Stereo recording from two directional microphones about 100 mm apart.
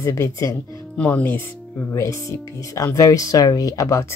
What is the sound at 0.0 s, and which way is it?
Speech, 30° left (ahead or behind).